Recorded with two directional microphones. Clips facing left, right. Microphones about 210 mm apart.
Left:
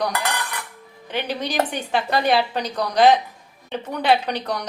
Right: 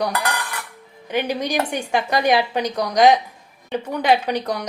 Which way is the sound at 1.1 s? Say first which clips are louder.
Right 4 dB; 10° right (ahead or behind).